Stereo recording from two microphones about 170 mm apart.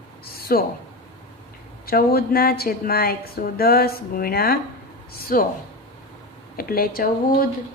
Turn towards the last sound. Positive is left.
turn(degrees=60)  # may be behind; listen again after turning